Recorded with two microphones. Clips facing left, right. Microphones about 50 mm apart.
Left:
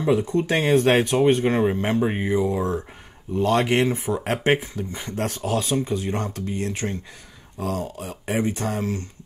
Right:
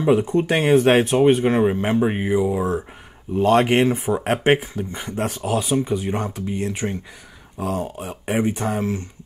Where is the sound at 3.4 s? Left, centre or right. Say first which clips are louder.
Right 4 dB; right.